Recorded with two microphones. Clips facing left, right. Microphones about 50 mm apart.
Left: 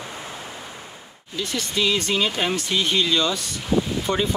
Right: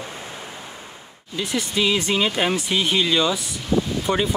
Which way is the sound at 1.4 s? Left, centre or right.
Centre.